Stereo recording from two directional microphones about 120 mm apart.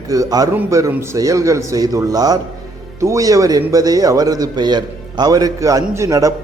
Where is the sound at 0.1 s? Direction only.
30° right (ahead or behind).